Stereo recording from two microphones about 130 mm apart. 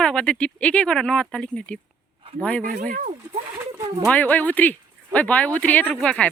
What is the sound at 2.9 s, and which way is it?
Speech, 80° right.